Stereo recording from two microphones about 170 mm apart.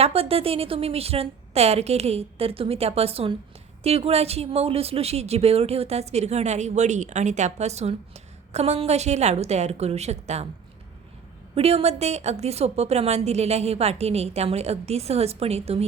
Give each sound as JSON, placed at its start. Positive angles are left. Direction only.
{"t": 0.0, "sound": "speech", "side_deg": -35}
{"t": 11.5, "sound": "speech", "side_deg": -35}